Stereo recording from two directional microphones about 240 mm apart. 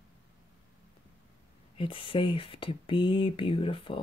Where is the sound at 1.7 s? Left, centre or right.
Left.